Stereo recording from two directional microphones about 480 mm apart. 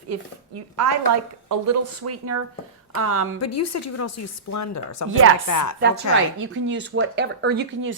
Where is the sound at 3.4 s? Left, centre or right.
Left.